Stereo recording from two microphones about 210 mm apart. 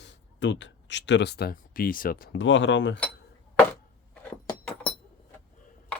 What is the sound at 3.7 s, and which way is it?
Chopping, 5° left (ahead or behind).